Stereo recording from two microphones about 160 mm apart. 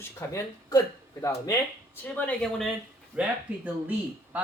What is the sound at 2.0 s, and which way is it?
Speech, 10° left (ahead or behind).